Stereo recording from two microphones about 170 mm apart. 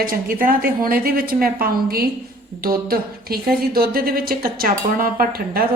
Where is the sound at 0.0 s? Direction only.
55° right (ahead or behind).